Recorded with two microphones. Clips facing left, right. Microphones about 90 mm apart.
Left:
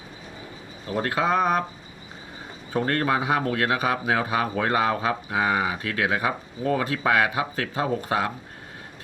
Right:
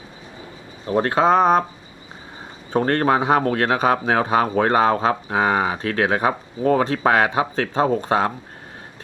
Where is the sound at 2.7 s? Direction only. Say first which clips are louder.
Right 5 dB; 35° right (ahead or behind).